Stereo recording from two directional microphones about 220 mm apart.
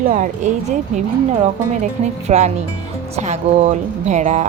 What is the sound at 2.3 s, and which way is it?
Speech, 30° right (ahead or behind).